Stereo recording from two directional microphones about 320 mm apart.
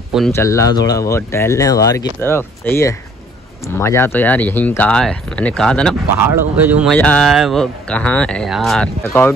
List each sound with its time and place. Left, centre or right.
0.1 s speech: centre